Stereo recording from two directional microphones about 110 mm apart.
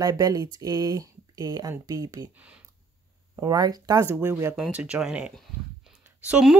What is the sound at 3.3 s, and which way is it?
Speech, 35° right (ahead or behind).